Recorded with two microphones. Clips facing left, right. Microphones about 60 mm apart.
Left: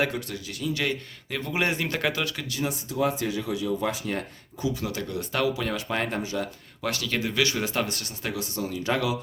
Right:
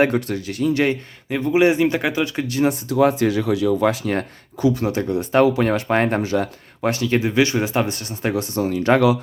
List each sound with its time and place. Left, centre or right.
0.0 s speech: right
1.3 s speech: centre
2.5 s speech: right
4.8 s speech: right
5.5 s speech: right
6.8 s speech: right
8.1 s speech: right